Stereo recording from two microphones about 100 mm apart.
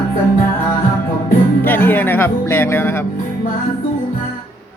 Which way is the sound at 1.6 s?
20° left (ahead or behind).